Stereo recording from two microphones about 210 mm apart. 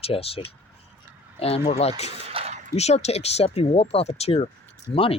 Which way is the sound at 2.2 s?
30° right (ahead or behind).